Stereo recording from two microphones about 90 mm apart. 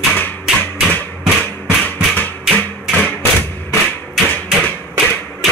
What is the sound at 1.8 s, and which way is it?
Music, 20° left (ahead or behind).